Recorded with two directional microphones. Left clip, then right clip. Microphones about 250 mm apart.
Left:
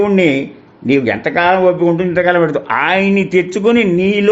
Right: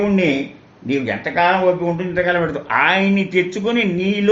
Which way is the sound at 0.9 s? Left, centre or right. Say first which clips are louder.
Left 7 dB; left.